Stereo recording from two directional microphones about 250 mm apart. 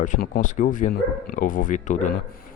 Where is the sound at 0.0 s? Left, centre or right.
Left.